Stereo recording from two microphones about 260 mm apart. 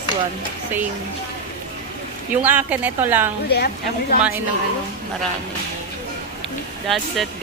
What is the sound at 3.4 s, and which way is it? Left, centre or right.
Speech, left.